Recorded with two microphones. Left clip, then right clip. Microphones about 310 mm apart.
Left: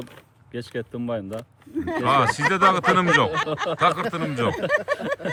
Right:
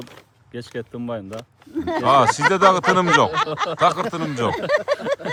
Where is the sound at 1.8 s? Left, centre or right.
Right.